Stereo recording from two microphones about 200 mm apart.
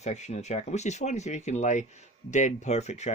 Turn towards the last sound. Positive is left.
turn(degrees=35)  # may be behind; listen again after turning